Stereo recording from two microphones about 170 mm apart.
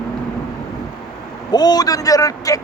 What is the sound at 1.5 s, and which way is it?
A man's voice, 25° left (ahead or behind).